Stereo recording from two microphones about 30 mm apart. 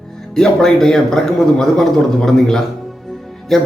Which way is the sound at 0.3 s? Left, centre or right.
Centre.